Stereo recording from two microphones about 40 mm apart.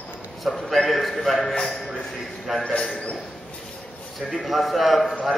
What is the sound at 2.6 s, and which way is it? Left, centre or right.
Speech, left.